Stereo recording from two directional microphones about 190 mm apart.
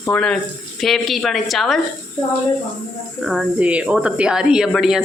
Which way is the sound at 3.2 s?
5° right (ahead or behind).